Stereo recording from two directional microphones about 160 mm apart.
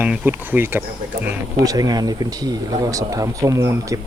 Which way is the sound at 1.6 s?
25° right (ahead or behind).